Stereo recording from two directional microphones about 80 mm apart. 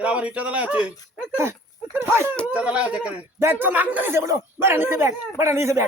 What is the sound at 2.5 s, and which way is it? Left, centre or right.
Speech, centre.